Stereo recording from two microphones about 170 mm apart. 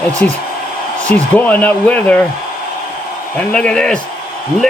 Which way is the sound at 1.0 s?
10° left (ahead or behind).